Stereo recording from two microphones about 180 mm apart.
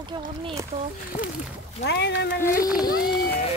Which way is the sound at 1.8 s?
65° left (ahead or behind).